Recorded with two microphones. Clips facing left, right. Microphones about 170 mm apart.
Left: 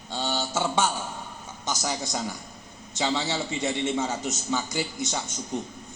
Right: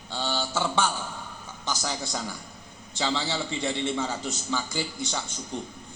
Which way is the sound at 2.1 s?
20° left (ahead or behind).